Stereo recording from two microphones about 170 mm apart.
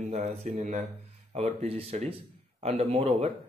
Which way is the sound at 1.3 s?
35° right (ahead or behind).